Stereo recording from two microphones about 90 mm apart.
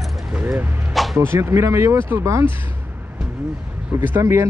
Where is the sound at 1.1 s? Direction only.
30° right (ahead or behind).